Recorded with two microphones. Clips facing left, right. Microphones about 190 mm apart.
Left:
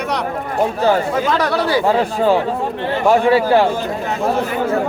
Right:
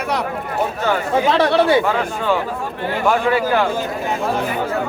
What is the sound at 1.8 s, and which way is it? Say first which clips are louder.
Speech: left 5 dB; 35° left (ahead or behind).